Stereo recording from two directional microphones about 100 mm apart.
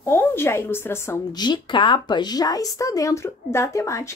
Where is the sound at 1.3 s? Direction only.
45° left (ahead or behind); by 4.1 s 30° left (ahead or behind).